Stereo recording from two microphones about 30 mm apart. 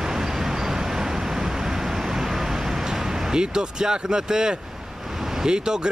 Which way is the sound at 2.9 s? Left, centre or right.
Right.